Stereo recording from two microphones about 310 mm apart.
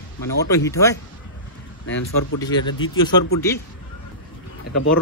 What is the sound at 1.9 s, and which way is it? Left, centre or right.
Speech, left.